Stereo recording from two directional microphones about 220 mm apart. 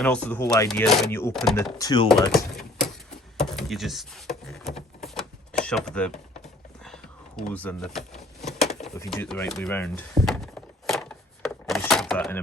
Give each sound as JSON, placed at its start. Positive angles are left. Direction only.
{"t": 0.0, "sound": "speech", "side_deg": 5}
{"t": 1.8, "sound": "speech", "side_deg": 20}
{"t": 2.3, "sound": "typewriter", "side_deg": 0}
{"t": 3.4, "sound": "a sound", "side_deg": 0}